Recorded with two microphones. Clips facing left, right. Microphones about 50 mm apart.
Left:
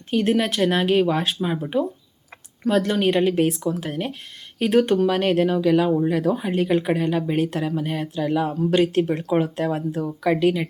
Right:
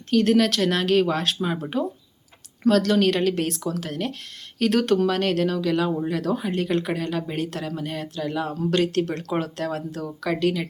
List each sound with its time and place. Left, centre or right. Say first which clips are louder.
0.2 s speech: even; centre
5.0 s speech: left 3 dB; left